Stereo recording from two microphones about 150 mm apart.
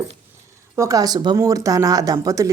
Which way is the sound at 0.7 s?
20° right (ahead or behind).